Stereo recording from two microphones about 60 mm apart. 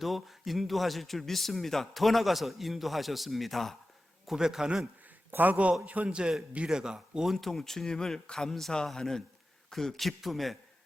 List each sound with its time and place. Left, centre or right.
0.0 s a man's voice: centre
4.3 s speech: centre
5.3 s a man's voice: right; by 7.3 s centre
7.3 s a man's voice: centre